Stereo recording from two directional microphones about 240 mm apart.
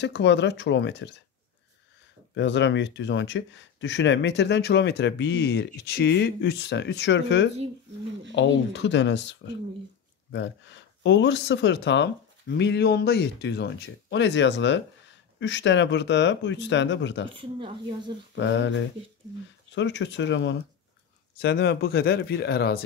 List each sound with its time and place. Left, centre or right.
0.0 s speech: left
2.3 s speech: left
17.3 s speech: right
18.3 s speech: left
19.7 s speech: left